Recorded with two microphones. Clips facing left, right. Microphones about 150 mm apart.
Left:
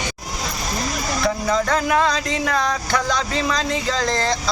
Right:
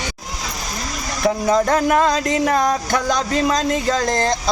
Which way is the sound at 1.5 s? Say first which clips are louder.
Right 2 dB; 45° right (ahead or behind).